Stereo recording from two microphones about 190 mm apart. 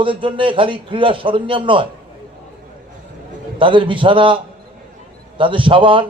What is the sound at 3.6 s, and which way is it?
Speech, 25° right (ahead or behind).